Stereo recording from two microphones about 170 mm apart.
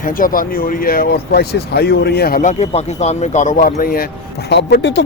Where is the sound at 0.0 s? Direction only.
55° left (ahead or behind).